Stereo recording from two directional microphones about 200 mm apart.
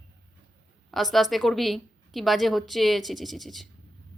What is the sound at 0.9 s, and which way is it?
A woman's voice, centre (ahead or behind).